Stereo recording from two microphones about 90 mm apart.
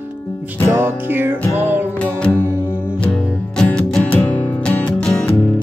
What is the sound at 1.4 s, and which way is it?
Music, 25° left (ahead or behind).